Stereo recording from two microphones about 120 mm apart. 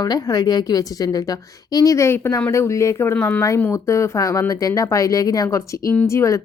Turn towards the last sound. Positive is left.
turn(degrees=25)  # may be behind; listen again after turning